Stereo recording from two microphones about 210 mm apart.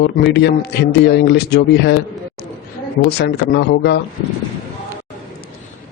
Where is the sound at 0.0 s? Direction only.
55° left (ahead or behind).